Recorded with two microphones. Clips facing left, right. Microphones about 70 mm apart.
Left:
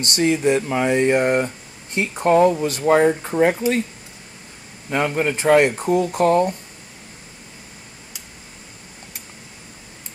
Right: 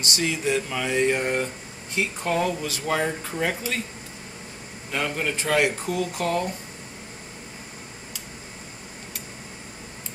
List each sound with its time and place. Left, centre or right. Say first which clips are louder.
0.2 s speech: left 8 dB; left
4.9 s speech: left 7 dB; left